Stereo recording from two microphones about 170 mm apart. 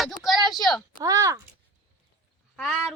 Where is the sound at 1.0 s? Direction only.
20° right (ahead or behind).